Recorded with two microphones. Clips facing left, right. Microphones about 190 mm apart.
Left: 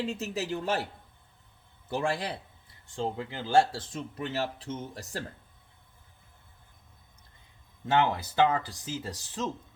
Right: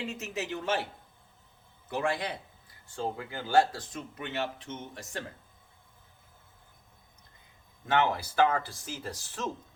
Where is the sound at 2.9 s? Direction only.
20° left (ahead or behind).